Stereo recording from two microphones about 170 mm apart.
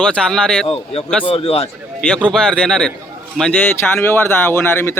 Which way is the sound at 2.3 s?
5° left (ahead or behind).